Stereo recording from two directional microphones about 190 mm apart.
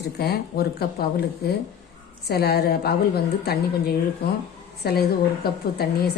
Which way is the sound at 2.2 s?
55° left (ahead or behind).